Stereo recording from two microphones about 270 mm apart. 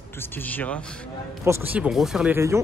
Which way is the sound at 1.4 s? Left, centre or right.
Centre.